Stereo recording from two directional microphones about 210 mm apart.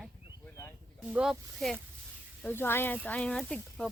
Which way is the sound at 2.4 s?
10° left (ahead or behind).